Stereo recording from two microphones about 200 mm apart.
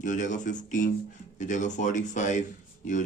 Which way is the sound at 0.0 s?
40° left (ahead or behind).